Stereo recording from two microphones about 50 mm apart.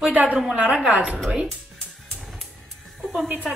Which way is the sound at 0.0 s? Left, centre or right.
Right.